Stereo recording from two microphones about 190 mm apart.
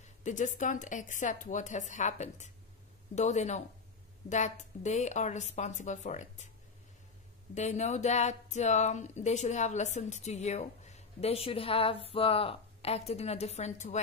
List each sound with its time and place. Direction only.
0.0 s speech: 40° left (ahead or behind)
7.5 s speech: 35° left (ahead or behind)